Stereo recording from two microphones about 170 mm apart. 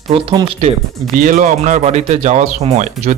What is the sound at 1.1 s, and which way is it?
Speech, 50° right (ahead or behind).